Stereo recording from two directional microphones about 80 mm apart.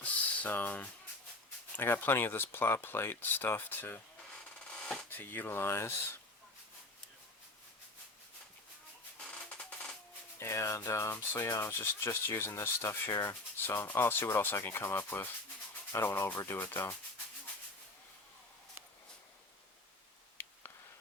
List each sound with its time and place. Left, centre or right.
0.0 s a sound: centre
1.7 s speech: left
5.0 s speech: left
9.5 s a sound: centre
10.3 s rub: left
16.0 s speech: left